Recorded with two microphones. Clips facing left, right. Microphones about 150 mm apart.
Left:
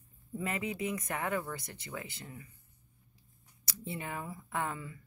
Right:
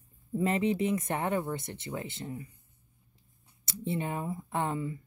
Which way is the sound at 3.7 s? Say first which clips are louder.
Right 7 dB; 25° right (ahead or behind).